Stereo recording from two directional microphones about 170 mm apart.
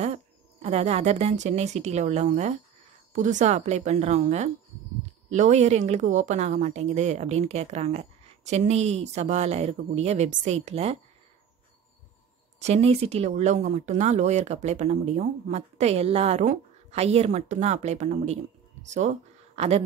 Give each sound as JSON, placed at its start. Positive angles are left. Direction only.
{"t": 0.0, "sound": "speech", "side_deg": -40}
{"t": 12.5, "sound": "speech", "side_deg": -40}